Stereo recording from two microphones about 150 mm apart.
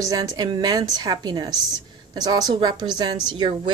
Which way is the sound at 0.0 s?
25° right (ahead or behind).